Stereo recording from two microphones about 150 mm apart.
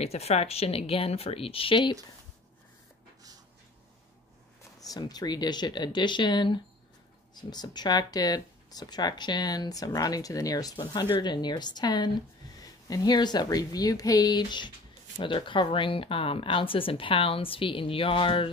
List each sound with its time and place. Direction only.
0.0 s speech: 45° left (ahead or behind)
4.7 s speech: 25° left (ahead or behind)